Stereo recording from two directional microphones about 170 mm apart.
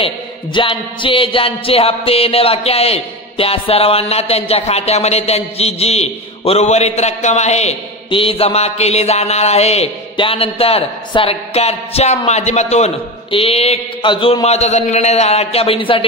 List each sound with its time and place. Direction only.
0.0 s speech: 30° left (ahead or behind)